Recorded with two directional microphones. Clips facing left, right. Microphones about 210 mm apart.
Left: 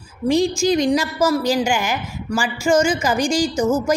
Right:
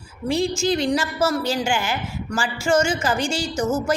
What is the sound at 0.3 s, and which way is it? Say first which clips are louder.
A woman's voice: left 4 dB; 15° left (ahead or behind).